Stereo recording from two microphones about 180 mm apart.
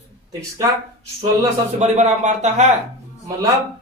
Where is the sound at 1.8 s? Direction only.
40° right (ahead or behind).